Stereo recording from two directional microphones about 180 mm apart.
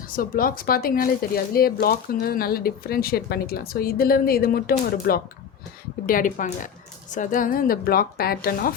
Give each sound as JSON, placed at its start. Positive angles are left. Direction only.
{"t": 0.1, "sound": "speech", "side_deg": 50}